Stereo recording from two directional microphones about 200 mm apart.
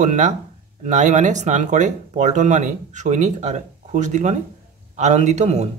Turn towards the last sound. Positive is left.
turn(degrees=-35)  # may be behind; listen again after turning